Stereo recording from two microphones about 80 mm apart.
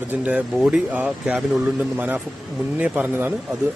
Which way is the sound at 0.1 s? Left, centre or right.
Centre.